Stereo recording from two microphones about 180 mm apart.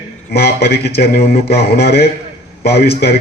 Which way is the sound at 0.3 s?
60° left (ahead or behind).